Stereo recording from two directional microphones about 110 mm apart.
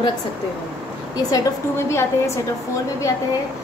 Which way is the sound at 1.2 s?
35° left (ahead or behind).